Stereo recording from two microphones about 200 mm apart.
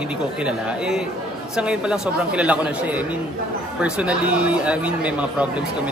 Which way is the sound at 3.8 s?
5° right (ahead or behind).